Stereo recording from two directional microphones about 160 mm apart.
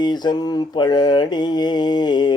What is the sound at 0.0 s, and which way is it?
Mantra, 25° left (ahead or behind).